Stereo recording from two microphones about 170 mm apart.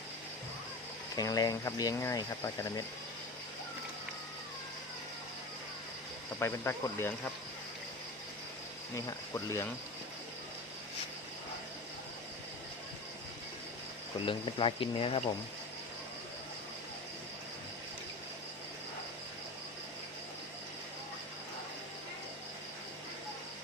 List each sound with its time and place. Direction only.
1.1 s speech: 20° left (ahead or behind)
6.4 s speech: 15° left (ahead or behind)
9.0 s speech: 20° left (ahead or behind)
14.3 s speech: 30° left (ahead or behind)